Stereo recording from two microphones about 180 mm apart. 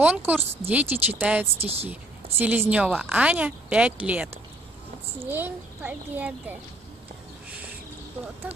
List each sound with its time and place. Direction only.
0.0 s a child's voice: 10° right (ahead or behind)
1.6 s speech: 35° right (ahead or behind)
1.9 s a woman's voice: 10° right (ahead or behind)